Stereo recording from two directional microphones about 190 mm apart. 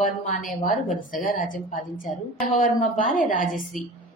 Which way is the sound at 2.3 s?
Centre (ahead or behind).